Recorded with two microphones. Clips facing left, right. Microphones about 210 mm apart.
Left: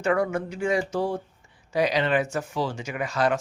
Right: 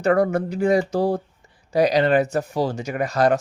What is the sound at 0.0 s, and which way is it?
Speech, 40° right (ahead or behind).